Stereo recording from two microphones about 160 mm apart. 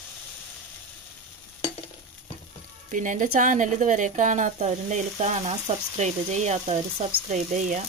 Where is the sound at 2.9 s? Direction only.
55° right (ahead or behind).